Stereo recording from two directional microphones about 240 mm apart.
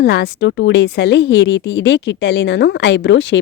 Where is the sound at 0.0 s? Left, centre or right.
Left.